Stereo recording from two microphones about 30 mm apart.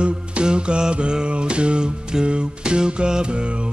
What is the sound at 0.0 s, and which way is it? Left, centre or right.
Music, right.